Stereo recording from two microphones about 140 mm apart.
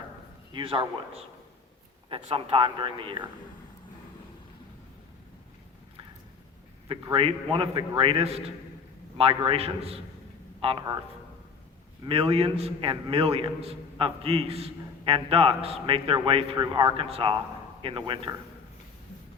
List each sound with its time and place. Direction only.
0.5 s a man's voice: 35° right (ahead or behind)
6.8 s a man's voice: 35° right (ahead or behind)
12.0 s a man's voice: 40° right (ahead or behind)